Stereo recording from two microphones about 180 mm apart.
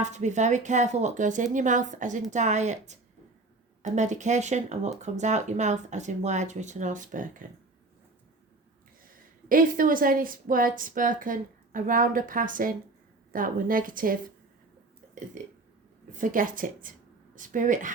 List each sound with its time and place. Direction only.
0.0 s a woman's voice: 40° right (ahead or behind)
9.1 s a woman's voice: 50° right (ahead or behind)
16.1 s a woman's voice: 50° right (ahead or behind)